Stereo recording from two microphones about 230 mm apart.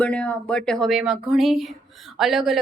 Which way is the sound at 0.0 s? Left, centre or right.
Centre.